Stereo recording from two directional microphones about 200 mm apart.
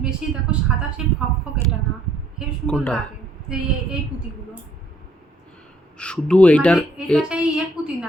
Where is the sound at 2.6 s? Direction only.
5° left (ahead or behind).